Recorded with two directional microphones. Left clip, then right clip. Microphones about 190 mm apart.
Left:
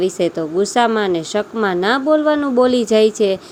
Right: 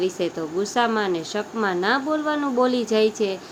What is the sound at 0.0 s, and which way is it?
Speech, 35° left (ahead or behind).